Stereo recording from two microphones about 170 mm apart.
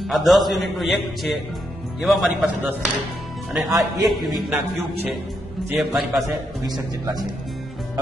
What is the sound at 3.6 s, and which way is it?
Speech, 20° right (ahead or behind).